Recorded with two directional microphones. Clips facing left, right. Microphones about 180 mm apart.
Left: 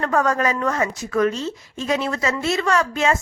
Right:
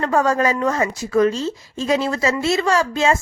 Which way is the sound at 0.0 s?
25° right (ahead or behind).